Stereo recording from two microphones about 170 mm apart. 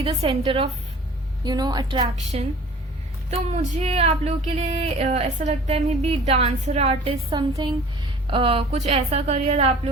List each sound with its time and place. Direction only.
0.0 s a woman's voice: 30° right (ahead or behind)
2.3 s speech: 40° right (ahead or behind)